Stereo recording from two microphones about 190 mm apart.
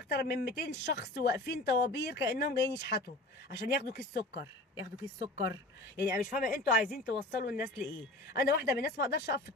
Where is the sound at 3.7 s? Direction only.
55° left (ahead or behind).